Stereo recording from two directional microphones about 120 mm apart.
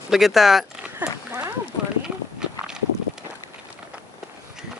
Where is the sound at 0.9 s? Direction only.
15° right (ahead or behind).